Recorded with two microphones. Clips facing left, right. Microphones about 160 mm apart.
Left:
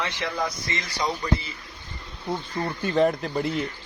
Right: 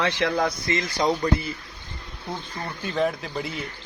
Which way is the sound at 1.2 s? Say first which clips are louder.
Right 3 dB; 45° right (ahead or behind).